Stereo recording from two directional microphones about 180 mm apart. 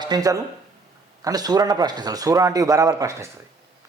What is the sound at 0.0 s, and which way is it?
A man's voice, 20° right (ahead or behind).